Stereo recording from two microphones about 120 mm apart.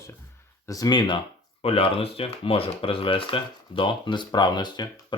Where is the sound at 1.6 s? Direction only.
50° left (ahead or behind).